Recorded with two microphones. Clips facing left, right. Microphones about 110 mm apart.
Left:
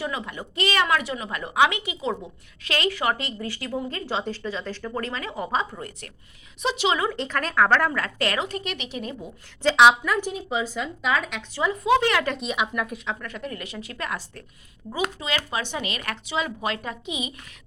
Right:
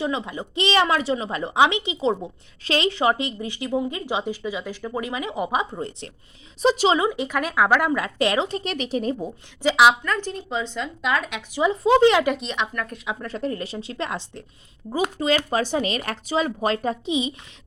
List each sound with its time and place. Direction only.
0.0 s a woman's voice: 20° right (ahead or behind)
6.6 s speech: 35° right (ahead or behind)
7.0 s speech: 10° right (ahead or behind)
8.7 s speech: 40° right (ahead or behind)
9.6 s speech: centre (ahead or behind)
10.1 s speech: 10° left (ahead or behind)
11.5 s a woman's voice: 20° right (ahead or behind)
12.4 s speech: 5° left (ahead or behind)
13.1 s a woman's voice: 30° right (ahead or behind)
14.9 s speech: 40° right (ahead or behind)